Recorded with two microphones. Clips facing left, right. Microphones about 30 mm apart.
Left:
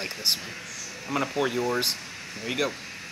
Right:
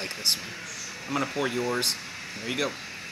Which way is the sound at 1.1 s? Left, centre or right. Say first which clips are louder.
Left 2 dB; centre.